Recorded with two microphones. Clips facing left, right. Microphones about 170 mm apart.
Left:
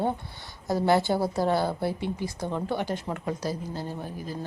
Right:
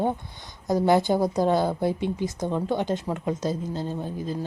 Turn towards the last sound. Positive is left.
turn(degrees=-20)  # may be behind; listen again after turning